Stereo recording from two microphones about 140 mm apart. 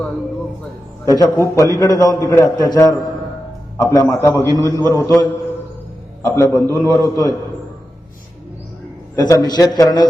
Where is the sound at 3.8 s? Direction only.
25° left (ahead or behind).